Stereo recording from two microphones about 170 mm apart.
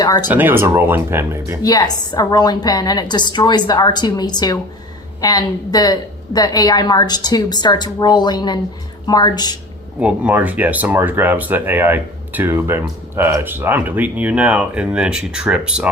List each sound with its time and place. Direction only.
0.0 s speech: 20° left (ahead or behind)
0.3 s speech: 10° right (ahead or behind)
1.6 s a woman's voice: 20° left (ahead or behind)
10.0 s speech: 10° right (ahead or behind)